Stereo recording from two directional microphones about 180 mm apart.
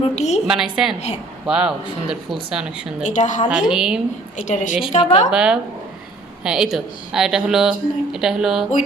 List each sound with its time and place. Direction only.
0.0 s a woman's voice: 40° left (ahead or behind)
0.4 s speech: centre (ahead or behind)
3.0 s a woman's voice: 45° left (ahead or behind)
3.7 s speech: 5° right (ahead or behind)
4.4 s a woman's voice: 40° left (ahead or behind)
5.3 s speech: 5° right (ahead or behind)